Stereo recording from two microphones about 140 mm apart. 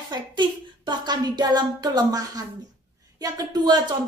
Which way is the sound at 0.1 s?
30° right (ahead or behind).